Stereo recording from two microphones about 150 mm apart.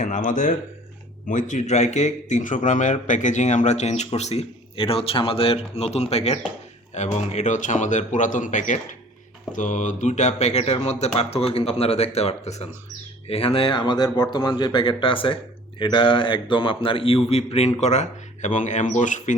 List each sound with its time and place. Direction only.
0.0 s a man's voice: 60° left (ahead or behind)